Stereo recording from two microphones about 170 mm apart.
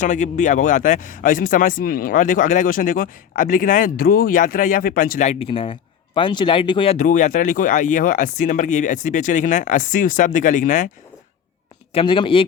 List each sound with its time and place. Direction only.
0.0 s speech: 45° left (ahead or behind)
11.9 s speech: 30° left (ahead or behind)